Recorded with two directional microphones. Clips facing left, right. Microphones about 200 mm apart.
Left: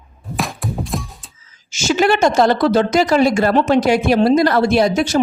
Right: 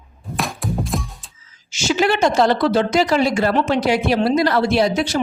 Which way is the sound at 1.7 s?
45° left (ahead or behind).